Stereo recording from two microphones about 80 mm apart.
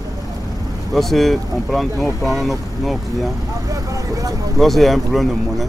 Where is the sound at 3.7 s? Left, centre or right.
Right.